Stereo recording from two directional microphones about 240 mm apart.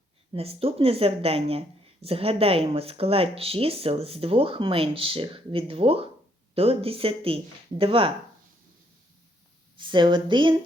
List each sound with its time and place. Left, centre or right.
0.3 s speech: right
9.7 s speech: centre